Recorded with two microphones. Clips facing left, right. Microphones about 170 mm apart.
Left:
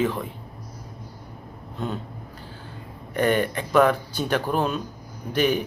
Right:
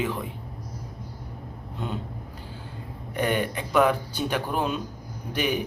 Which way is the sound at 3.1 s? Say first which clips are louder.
Left 4 dB; 10° right (ahead or behind).